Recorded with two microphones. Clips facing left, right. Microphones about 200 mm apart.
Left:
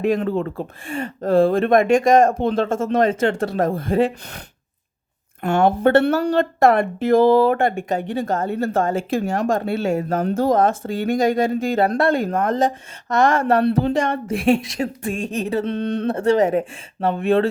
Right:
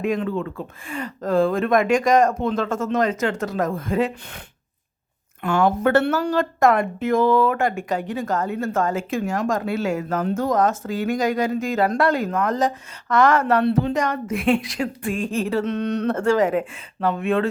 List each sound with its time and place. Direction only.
0.1 s speech: 40° left (ahead or behind)
0.9 s speech: 25° left (ahead or behind)
5.8 s speech: 35° left (ahead or behind)
15.6 s speech: 30° left (ahead or behind)